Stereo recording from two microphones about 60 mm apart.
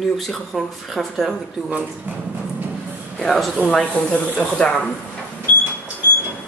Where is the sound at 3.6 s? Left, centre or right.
Centre.